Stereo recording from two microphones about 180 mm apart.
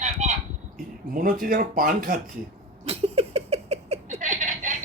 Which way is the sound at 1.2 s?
50° right (ahead or behind).